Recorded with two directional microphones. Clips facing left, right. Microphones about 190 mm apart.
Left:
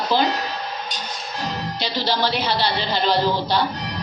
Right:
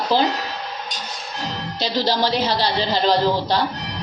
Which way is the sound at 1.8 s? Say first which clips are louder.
Right 3 dB; 40° right (ahead or behind).